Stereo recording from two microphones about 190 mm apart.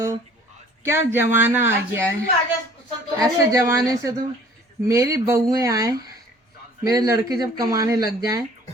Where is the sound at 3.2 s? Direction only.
15° right (ahead or behind).